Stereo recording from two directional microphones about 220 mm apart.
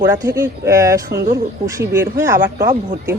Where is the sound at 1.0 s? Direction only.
45° right (ahead or behind).